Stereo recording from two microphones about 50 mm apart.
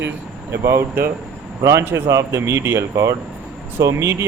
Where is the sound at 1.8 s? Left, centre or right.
Right.